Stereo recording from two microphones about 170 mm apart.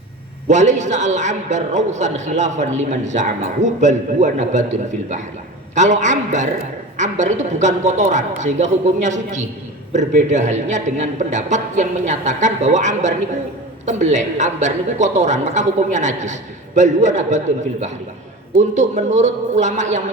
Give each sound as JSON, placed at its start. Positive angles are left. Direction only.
{"t": 0.4, "sound": "a man's voice", "side_deg": -45}